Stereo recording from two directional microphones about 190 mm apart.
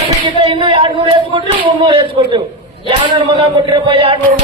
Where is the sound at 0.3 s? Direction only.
25° right (ahead or behind).